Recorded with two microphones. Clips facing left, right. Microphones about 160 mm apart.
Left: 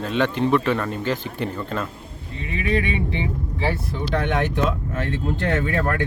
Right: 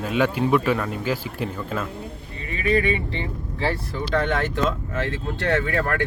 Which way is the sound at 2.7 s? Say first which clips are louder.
Right 1 dB; 15° left (ahead or behind).